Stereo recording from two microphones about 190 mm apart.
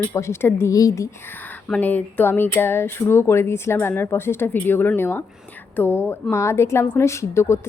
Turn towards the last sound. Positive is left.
turn(degrees=15)  # may be behind; listen again after turning